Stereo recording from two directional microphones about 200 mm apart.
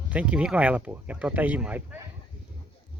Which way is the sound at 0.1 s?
5° right (ahead or behind).